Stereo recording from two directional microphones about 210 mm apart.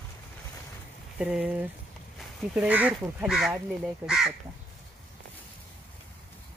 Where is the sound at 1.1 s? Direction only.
5° right (ahead or behind).